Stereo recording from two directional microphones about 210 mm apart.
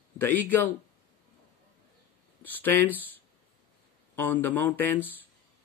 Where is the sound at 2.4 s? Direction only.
10° left (ahead or behind).